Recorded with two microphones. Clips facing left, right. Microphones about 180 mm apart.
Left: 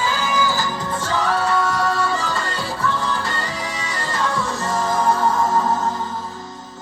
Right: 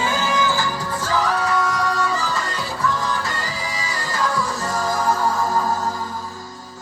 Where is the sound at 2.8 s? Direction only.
30° left (ahead or behind).